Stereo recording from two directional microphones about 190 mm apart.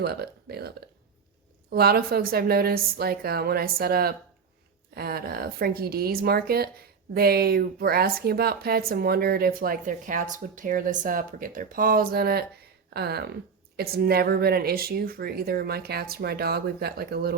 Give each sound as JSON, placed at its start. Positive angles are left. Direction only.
{"t": 0.0, "sound": "speech", "side_deg": -55}
{"t": 1.7, "sound": "speech", "side_deg": -55}